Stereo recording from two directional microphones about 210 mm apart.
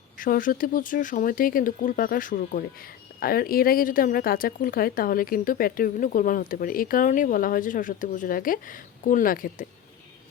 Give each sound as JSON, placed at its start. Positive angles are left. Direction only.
{"t": 0.2, "sound": "speech", "side_deg": 40}